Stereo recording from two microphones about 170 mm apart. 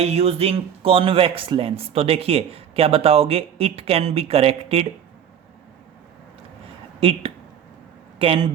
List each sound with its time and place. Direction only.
0.0 s speech: 40° right (ahead or behind)
7.0 s speech: 30° right (ahead or behind)